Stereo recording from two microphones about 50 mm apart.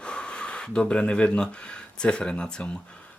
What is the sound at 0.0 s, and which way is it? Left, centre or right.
Speech, centre.